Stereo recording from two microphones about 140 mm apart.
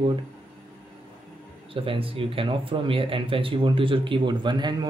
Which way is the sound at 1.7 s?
40° right (ahead or behind).